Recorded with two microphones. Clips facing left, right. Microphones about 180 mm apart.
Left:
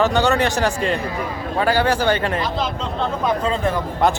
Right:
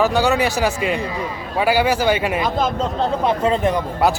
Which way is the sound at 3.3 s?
20° right (ahead or behind).